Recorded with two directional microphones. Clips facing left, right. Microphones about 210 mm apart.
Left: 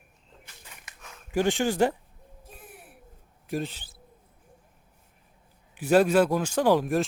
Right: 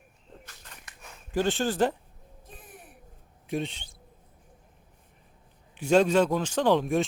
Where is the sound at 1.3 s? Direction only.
15° left (ahead or behind).